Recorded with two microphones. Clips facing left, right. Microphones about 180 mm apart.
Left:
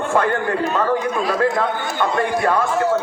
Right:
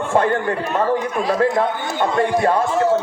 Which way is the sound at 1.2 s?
25° right (ahead or behind).